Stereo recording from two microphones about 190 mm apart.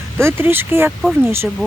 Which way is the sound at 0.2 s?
15° right (ahead or behind).